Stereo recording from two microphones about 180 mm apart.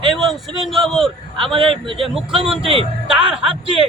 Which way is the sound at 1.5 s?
30° right (ahead or behind).